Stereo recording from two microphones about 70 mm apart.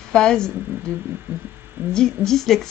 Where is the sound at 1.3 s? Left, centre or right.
Right.